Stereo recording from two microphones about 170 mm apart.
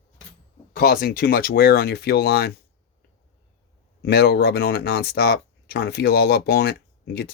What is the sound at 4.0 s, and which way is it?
Speech, 70° left (ahead or behind).